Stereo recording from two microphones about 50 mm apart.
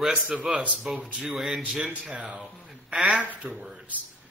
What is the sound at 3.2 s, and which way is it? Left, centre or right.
Speech, right.